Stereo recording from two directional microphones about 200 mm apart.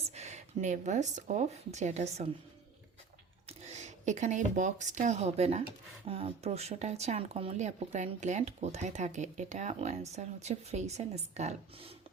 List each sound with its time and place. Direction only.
0.0 s speech: 35° right (ahead or behind)
3.4 s speech: 35° right (ahead or behind)